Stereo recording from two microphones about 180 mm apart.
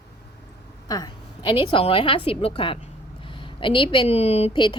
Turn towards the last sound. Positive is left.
turn(degrees=25)  # may be behind; listen again after turning